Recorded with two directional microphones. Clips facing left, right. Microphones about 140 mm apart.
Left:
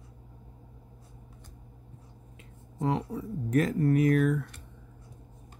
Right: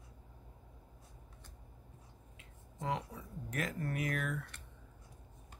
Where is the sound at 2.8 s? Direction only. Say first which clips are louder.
Left 9 dB; 35° left (ahead or behind).